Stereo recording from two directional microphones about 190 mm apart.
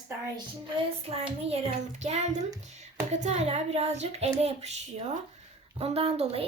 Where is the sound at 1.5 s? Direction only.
35° right (ahead or behind).